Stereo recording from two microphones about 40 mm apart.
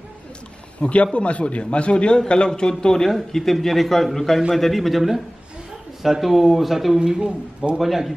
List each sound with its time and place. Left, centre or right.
0.7 s a man's voice: left; by 7.0 s centre
7.0 s a man's voice: right
7.8 s speech: centre